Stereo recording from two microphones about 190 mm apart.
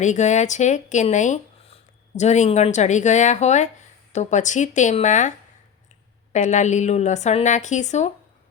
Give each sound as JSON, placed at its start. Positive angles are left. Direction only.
{"t": 0.0, "sound": "speech", "side_deg": 40}
{"t": 6.3, "sound": "speech", "side_deg": 40}